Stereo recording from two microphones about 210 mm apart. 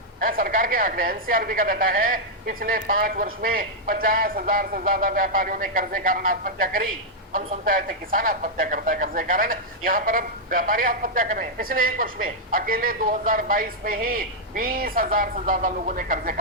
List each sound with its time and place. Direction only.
0.3 s a woman's voice: 40° right (ahead or behind)